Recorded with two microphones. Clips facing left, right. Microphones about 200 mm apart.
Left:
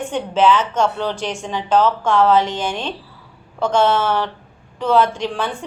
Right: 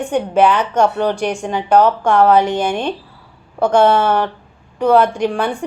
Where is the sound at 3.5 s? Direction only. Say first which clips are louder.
Right 4 dB; 60° right (ahead or behind).